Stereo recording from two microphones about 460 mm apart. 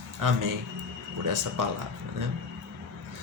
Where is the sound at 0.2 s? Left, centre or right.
Right.